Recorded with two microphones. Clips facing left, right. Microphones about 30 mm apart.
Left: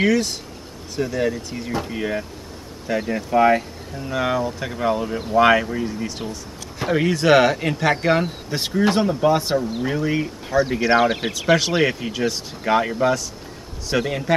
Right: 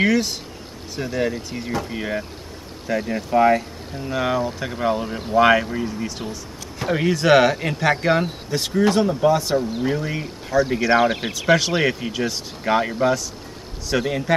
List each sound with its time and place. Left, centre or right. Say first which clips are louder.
0.0 s speech: even; centre
8.8 s speech: even; centre
9.6 s speech: even; centre